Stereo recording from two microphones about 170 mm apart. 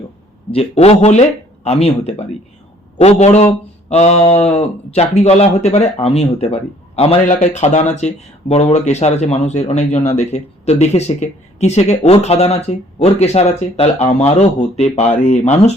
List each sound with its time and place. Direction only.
0.5 s speech: 35° left (ahead or behind)